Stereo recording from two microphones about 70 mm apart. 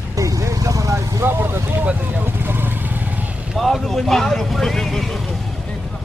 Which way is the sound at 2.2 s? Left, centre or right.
Right.